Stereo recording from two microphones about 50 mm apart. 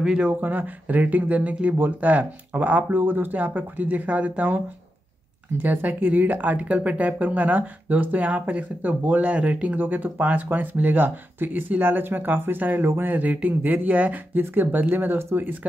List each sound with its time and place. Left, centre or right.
0.2 s speech: right